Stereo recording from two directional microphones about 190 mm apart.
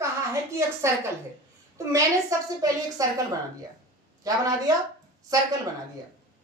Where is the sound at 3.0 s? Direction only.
20° right (ahead or behind).